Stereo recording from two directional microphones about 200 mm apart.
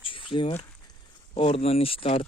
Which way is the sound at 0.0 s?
25° left (ahead or behind).